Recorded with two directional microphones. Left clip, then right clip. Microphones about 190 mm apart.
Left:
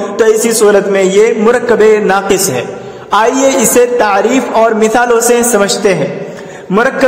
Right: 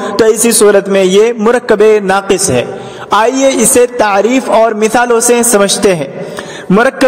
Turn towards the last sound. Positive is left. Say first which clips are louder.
# right 1 dB
turn(degrees=-40)  # may be behind; listen again after turning